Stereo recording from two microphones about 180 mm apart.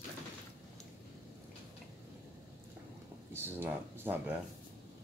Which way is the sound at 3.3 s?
10° right (ahead or behind).